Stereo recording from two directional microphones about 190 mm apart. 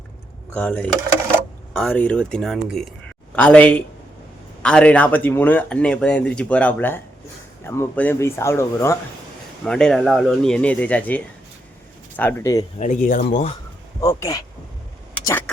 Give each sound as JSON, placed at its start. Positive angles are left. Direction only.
{"t": 0.5, "sound": "speech", "side_deg": 5}
{"t": 9.6, "sound": "speech", "side_deg": 5}
{"t": 12.8, "sound": "speech", "side_deg": 45}
{"t": 14.0, "sound": "speech", "side_deg": 15}